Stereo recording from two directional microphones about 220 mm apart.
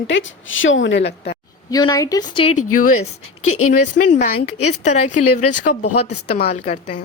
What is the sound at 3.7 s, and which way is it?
Speech, 35° left (ahead or behind).